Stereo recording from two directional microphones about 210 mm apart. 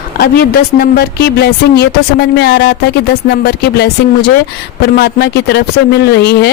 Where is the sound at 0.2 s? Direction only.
45° left (ahead or behind).